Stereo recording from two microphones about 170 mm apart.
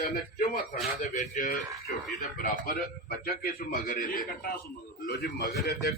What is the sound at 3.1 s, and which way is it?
A man's voice, 65° left (ahead or behind).